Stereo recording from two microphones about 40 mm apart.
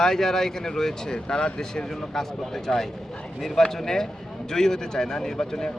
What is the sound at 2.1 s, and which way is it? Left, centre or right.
Speech, centre.